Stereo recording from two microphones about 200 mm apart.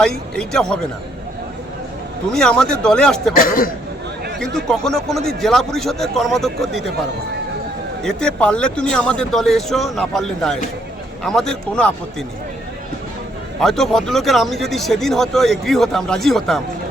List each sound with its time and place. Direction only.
0.0 s speech: 5° left (ahead or behind)
2.3 s speech: 5° left (ahead or behind)
3.3 s speech: 45° left (ahead or behind)
4.4 s speech: 5° left (ahead or behind)
8.0 s speech: 5° left (ahead or behind)
13.6 s speech: centre (ahead or behind)